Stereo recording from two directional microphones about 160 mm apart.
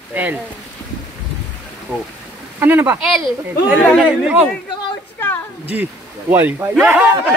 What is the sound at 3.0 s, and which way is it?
Speech, centre (ahead or behind).